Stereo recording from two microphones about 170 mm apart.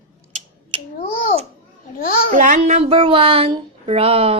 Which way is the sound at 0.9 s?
50° left (ahead or behind).